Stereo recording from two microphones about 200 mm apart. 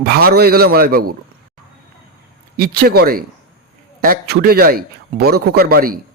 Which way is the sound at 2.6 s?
50° right (ahead or behind).